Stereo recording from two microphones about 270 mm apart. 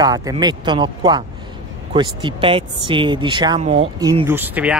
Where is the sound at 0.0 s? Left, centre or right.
Centre.